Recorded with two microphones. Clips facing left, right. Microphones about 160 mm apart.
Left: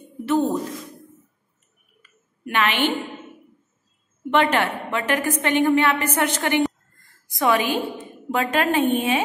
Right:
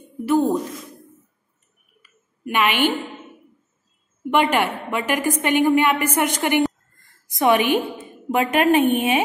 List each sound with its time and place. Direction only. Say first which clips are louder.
0.2 s speech: right 2 dB; 10° right (ahead or behind)
2.0 s a sound: even; 10° right (ahead or behind)
4.3 s a woman's voice: right 1 dB; 10° right (ahead or behind)